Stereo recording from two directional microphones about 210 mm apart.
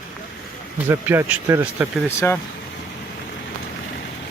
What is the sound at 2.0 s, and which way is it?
Speech, 10° left (ahead or behind).